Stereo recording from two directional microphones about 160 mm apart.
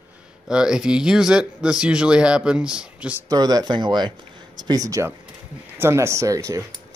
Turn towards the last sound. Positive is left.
turn(degrees=-20)  # may be behind; listen again after turning